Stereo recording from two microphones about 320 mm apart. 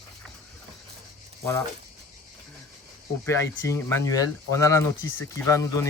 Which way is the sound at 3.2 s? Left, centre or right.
Centre.